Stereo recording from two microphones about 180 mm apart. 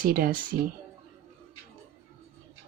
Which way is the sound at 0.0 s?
55° right (ahead or behind).